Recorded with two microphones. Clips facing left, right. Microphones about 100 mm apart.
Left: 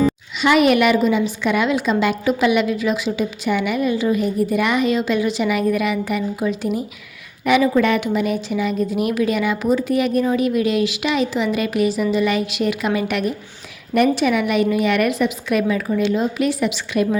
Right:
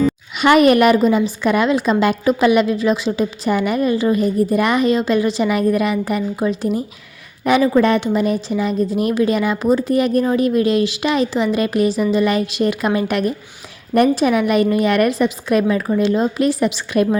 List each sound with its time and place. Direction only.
0.3 s a woman's voice: 50° right (ahead or behind)